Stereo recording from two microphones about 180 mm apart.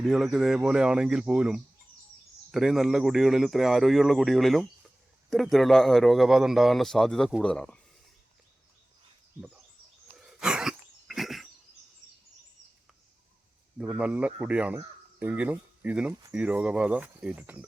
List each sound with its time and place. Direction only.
0.0 s a man's voice: centre (ahead or behind)
10.2 s a sound: 5° right (ahead or behind)
13.7 s speech: 5° right (ahead or behind)